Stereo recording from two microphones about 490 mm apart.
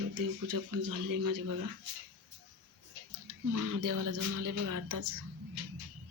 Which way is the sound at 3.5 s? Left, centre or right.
Right.